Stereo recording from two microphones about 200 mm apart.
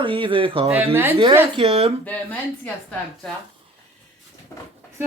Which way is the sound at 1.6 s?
30° right (ahead or behind).